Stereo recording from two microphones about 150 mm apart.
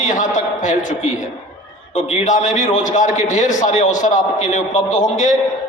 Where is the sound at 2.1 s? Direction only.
55° left (ahead or behind).